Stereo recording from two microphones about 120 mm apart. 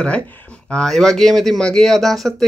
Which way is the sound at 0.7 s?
5° left (ahead or behind).